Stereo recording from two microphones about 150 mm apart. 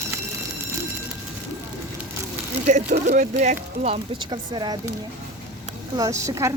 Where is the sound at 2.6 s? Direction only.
50° right (ahead or behind); by 4.7 s 30° right (ahead or behind).